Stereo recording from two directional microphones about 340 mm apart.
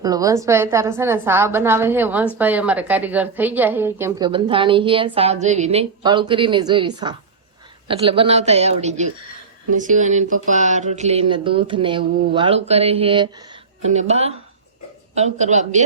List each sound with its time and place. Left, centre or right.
0.0 s a woman's voice: centre